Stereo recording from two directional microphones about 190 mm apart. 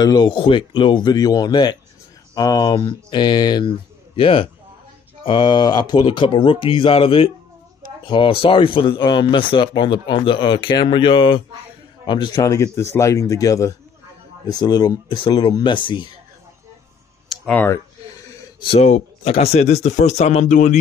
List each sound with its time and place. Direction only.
0.0 s speech: 20° left (ahead or behind)
17.3 s a sound: 5° left (ahead or behind)
18.7 s speech: 35° left (ahead or behind)